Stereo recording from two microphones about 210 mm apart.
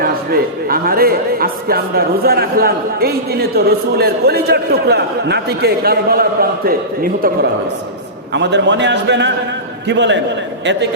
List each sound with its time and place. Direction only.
0.0 s a man's voice: 45° right (ahead or behind)
8.3 s a man's voice: 55° right (ahead or behind)